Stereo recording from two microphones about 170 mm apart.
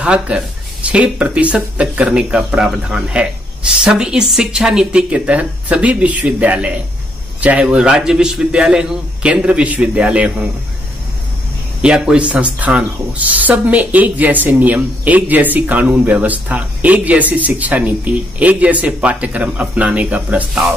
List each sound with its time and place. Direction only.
0.0 s speech: 5° right (ahead or behind)
11.8 s speech: 5° right (ahead or behind)